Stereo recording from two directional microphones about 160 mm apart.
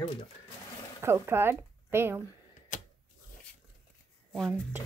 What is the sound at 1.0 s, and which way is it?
Speech, 15° right (ahead or behind).